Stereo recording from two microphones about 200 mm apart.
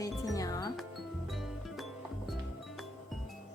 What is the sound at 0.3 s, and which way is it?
Music, 15° left (ahead or behind).